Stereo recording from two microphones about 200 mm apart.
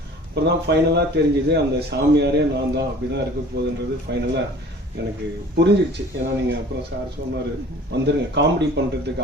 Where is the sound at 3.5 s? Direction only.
55° right (ahead or behind).